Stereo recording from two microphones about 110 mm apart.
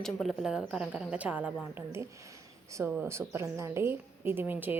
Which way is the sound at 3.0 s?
25° right (ahead or behind).